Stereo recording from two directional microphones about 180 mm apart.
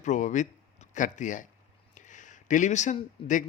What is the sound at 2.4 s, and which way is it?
Speech, 45° left (ahead or behind).